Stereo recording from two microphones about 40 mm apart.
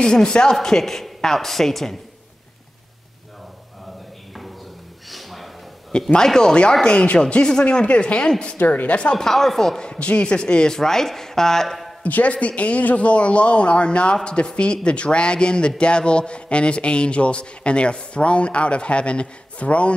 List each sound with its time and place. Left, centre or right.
0.0 s a woman's voice: centre
5.1 s a sound: centre
5.9 s a woman's voice: centre
6.9 s a man's voice: left
9.1 s a woman's voice: centre
9.8 s a man's voice: left
10.8 s a woman's voice: centre
12.0 s a man's voice: left